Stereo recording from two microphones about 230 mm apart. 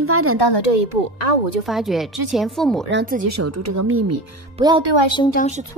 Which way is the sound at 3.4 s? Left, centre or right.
Right.